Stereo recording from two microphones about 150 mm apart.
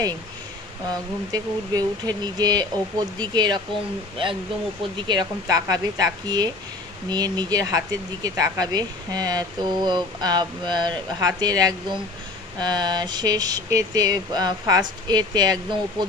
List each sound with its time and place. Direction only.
0.8 s speech: 25° right (ahead or behind)
4.9 s speech: 30° right (ahead or behind)